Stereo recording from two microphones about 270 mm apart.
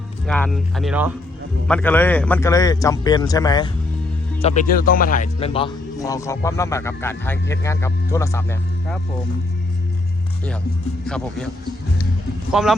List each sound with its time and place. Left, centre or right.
0.3 s speech: centre
4.4 s a man's voice: left
11.0 s speech: centre
12.5 s speech: centre